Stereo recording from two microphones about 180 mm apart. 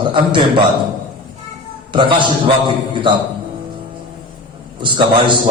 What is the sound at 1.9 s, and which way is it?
A man's voice, 25° right (ahead or behind).